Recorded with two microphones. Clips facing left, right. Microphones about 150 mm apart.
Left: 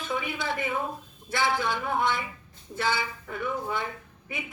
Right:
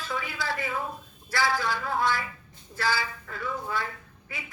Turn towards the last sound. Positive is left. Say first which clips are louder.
# left 4 dB
turn(degrees=20)  # may be behind; listen again after turning